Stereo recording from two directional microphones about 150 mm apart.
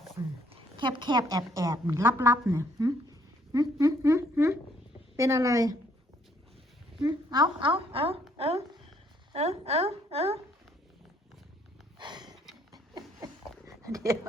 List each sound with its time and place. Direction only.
0.2 s speech: 25° right (ahead or behind)
7.0 s a woman's voice: 25° right (ahead or behind)
11.9 s a sound: 30° right (ahead or behind)
13.7 s dog: 20° right (ahead or behind)